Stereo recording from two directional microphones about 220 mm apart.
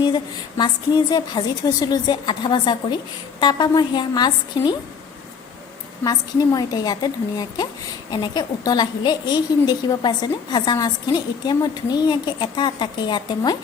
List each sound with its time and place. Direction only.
0.0 s a woman's voice: 20° left (ahead or behind)
6.1 s a woman's voice: 15° left (ahead or behind)